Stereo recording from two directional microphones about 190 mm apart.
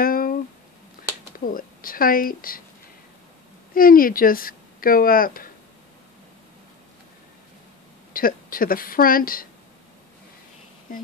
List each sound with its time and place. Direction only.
0.0 s a sound: 50° left (ahead or behind)
1.4 s speech: 45° left (ahead or behind)
3.7 s speech: 50° left (ahead or behind)
8.1 s speech: 50° left (ahead or behind)